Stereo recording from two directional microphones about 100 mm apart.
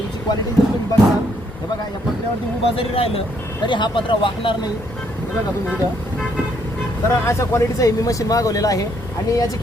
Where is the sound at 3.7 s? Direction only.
55° left (ahead or behind).